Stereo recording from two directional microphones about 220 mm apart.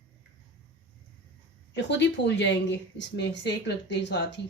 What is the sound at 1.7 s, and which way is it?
Speech, 50° left (ahead or behind).